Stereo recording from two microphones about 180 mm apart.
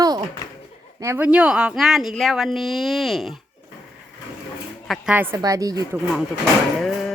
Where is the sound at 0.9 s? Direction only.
15° right (ahead or behind).